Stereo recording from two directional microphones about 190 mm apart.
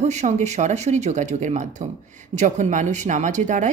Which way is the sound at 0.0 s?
35° right (ahead or behind).